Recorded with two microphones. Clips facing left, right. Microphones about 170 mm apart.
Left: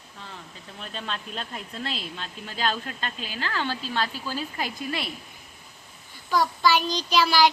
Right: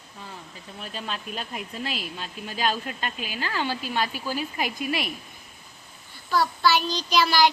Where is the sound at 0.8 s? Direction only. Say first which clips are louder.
Even; 5° right (ahead or behind).